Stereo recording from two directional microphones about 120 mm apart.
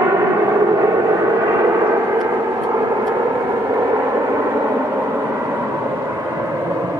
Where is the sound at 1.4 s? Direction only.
25° right (ahead or behind).